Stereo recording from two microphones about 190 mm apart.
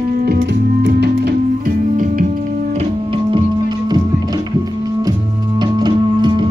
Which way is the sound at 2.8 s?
25° right (ahead or behind).